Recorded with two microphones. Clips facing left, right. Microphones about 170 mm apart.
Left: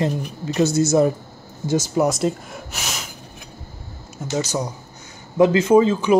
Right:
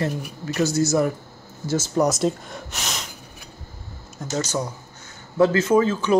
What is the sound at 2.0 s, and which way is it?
Speech, centre (ahead or behind).